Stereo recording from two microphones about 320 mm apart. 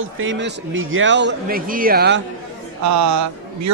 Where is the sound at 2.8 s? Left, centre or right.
Right.